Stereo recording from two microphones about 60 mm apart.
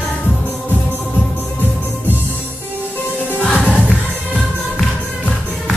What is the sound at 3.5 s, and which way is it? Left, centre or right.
Music, left.